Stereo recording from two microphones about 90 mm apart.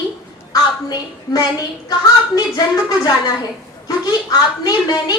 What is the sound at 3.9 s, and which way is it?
A woman's voice, 45° left (ahead or behind).